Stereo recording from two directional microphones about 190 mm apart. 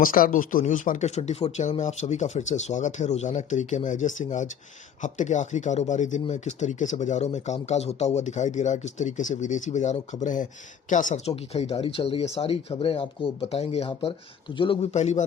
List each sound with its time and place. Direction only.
0.0 s speech: 45° left (ahead or behind)